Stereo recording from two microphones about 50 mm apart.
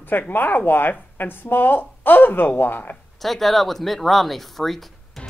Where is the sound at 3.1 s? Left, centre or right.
Centre.